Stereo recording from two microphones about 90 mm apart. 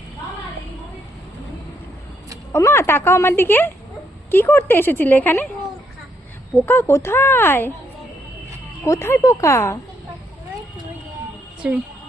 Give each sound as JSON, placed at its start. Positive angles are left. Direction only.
{"t": 2.5, "sound": "speech", "side_deg": 30}
{"t": 6.7, "sound": "speech", "side_deg": 25}
{"t": 8.8, "sound": "speech", "side_deg": 30}
{"t": 11.6, "sound": "a woman's voice", "side_deg": -10}